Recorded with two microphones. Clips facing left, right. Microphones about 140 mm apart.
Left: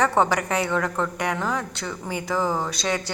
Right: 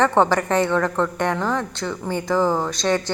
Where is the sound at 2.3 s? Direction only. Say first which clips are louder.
Right 5 dB; 30° right (ahead or behind).